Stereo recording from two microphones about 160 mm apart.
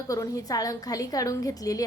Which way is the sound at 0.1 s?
20° left (ahead or behind).